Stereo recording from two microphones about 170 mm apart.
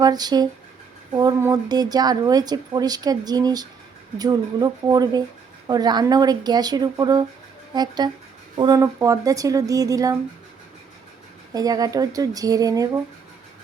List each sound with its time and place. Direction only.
0.0 s speech: 25° right (ahead or behind)
11.5 s speech: 20° right (ahead or behind)